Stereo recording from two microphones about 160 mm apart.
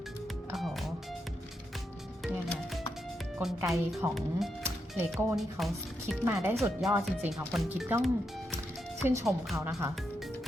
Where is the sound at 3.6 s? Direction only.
Centre (ahead or behind).